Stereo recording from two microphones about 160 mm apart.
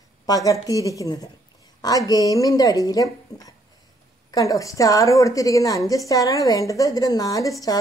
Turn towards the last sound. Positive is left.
turn(degrees=20)  # may be behind; listen again after turning